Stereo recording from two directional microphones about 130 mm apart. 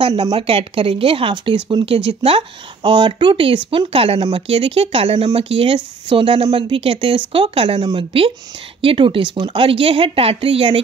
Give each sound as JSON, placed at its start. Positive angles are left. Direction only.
{"t": 0.1, "sound": "speech", "side_deg": -30}
{"t": 0.4, "sound": "speech", "side_deg": -45}